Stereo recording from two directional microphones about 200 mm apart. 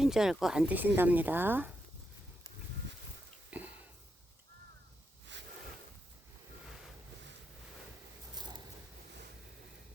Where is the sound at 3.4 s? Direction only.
10° right (ahead or behind).